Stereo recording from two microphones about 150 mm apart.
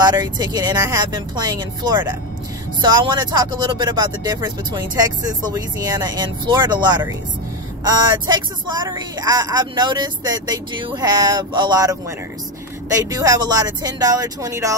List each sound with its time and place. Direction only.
0.0 s speech: 30° right (ahead or behind)
13.0 s speech: 25° right (ahead or behind)